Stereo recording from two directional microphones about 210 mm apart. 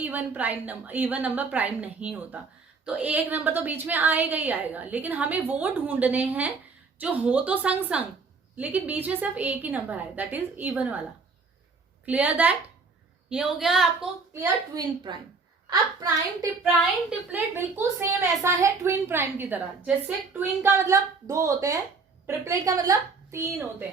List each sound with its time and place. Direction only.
0.0 s a woman's voice: 10° right (ahead or behind)
12.0 s a woman's voice: 5° right (ahead or behind)
14.3 s a woman's voice: 20° right (ahead or behind)
16.6 s a woman's voice: 5° right (ahead or behind)